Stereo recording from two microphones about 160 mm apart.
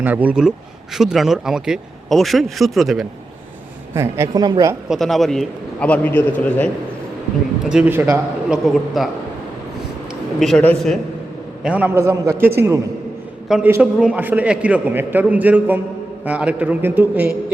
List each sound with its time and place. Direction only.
0.0 s a man's voice: 10° right (ahead or behind)
3.9 s a man's voice: 15° right (ahead or behind)
4.4 s a woman's voice: 30° right (ahead or behind)
4.9 s speech: centre (ahead or behind)
7.6 s speech: 5° right (ahead or behind)
10.4 s speech: 5° left (ahead or behind)
11.6 s a man's voice: 10° right (ahead or behind)
13.5 s a man's voice: 5° right (ahead or behind)